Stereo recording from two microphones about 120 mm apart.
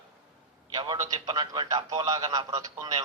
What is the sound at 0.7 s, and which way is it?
A man's voice, 35° right (ahead or behind).